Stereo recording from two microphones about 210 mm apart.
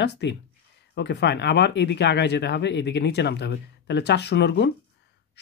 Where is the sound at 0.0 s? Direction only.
55° left (ahead or behind).